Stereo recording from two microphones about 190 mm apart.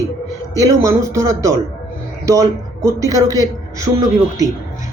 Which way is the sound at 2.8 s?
15° right (ahead or behind).